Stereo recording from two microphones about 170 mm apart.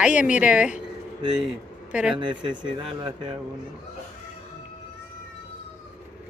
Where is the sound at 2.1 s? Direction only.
25° right (ahead or behind).